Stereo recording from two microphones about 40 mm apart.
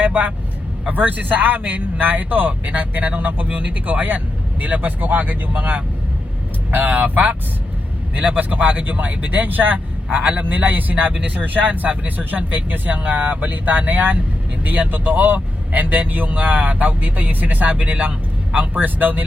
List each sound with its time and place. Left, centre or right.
0.0 s vehicle: right
0.9 s speech: right